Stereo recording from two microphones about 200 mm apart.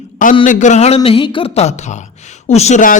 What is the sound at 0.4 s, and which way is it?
A man's voice, 40° left (ahead or behind).